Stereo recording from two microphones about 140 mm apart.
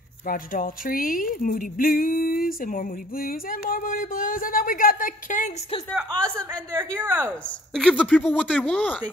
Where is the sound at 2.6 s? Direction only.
90° left; by 5.8 s 45° left (ahead or behind).